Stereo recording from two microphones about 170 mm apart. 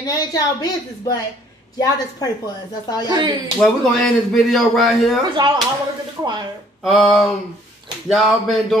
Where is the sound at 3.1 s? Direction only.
25° right (ahead or behind).